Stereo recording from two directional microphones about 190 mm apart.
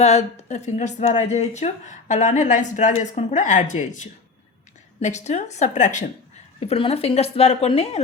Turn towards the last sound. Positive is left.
turn(degrees=30)  # may be behind; listen again after turning